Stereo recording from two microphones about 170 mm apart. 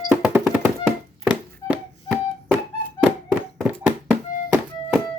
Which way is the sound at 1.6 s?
10° right (ahead or behind).